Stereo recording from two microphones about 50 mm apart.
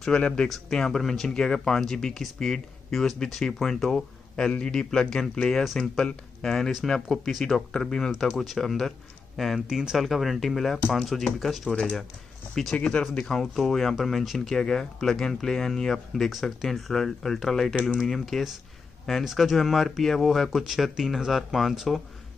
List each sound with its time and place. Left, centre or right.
0.1 s speech: centre
5.6 s speech: centre
12.7 s speech: left
13.2 s speech: centre